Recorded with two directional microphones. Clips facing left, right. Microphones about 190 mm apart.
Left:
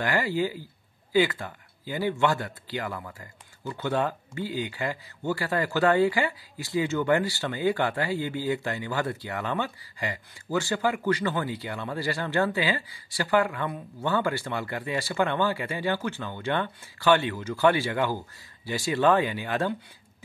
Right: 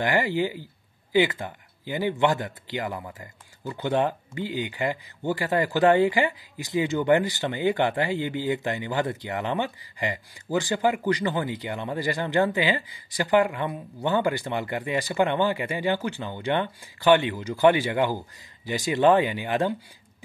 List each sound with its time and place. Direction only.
0.0 s speech: 15° right (ahead or behind)